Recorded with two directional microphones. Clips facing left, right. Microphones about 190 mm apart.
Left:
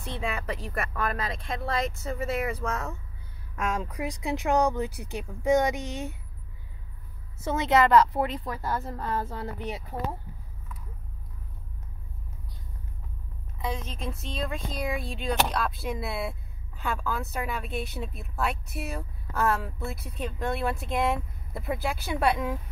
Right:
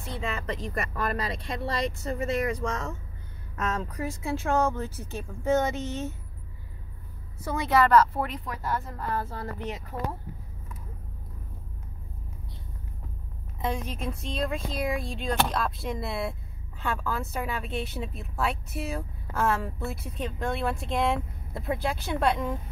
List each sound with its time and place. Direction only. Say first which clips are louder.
0.2 s speech: even; 10° left (ahead or behind)
7.3 s a woman's voice: left 1 dB; 25° left (ahead or behind)
8.5 s a woman's voice: left 1 dB; 30° left (ahead or behind)
9.4 s speech: even; 10° left (ahead or behind)
13.6 s speech: right 3 dB; 10° right (ahead or behind); by 22.6 s 5° left (ahead or behind)